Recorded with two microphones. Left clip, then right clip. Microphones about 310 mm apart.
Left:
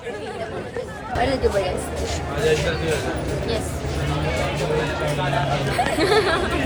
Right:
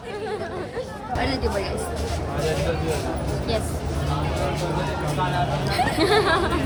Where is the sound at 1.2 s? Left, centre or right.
Centre.